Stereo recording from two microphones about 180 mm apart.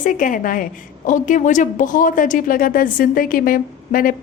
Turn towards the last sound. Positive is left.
turn(degrees=50)  # may be behind; listen again after turning